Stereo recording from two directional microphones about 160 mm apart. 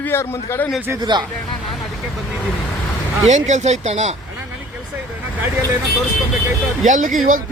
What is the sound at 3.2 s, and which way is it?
Speech, 50° right (ahead or behind).